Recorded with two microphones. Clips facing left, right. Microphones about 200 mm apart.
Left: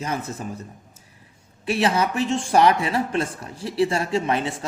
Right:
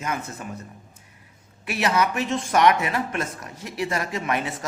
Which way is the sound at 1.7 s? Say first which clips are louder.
Left 2 dB; 30° left (ahead or behind).